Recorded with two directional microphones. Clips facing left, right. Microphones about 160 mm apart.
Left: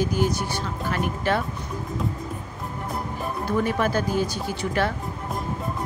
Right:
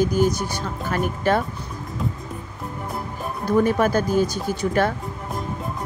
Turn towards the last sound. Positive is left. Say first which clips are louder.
# right 4 dB
turn(degrees=-45)  # may be behind; listen again after turning